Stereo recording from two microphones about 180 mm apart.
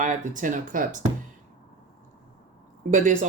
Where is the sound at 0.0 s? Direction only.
45° right (ahead or behind).